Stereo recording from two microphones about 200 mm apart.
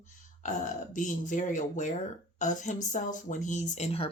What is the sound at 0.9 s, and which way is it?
Speech, 40° left (ahead or behind).